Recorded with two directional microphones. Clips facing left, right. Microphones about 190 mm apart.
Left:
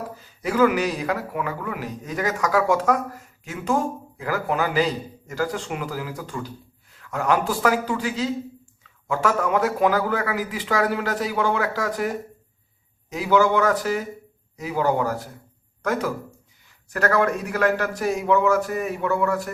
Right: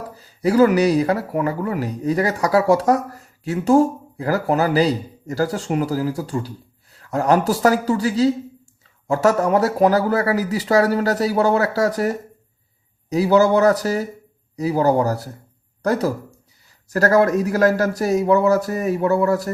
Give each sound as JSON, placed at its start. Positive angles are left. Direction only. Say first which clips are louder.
{"t": 0.2, "sound": "a man's voice", "louder": "right 5 dB", "side_deg": -35}